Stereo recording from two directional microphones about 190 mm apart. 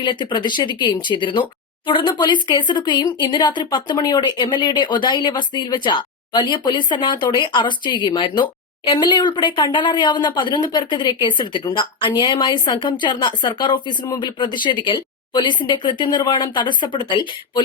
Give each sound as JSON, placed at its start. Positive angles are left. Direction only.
{"t": 0.0, "sound": "speech", "side_deg": 25}